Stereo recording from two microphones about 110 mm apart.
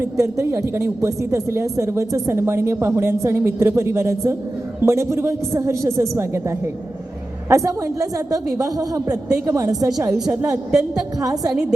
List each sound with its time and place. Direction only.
0.0 s a woman's voice: 25° right (ahead or behind)
10.7 s a woman's voice: 5° right (ahead or behind)
11.2 s a woman's voice: 35° right (ahead or behind)